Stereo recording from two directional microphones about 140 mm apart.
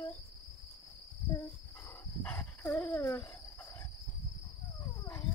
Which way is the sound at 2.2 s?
15° left (ahead or behind).